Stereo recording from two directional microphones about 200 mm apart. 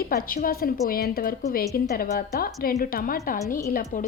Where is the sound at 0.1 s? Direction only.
45° left (ahead or behind).